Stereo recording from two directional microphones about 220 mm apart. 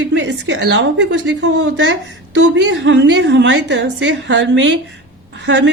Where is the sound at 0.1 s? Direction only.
55° right (ahead or behind).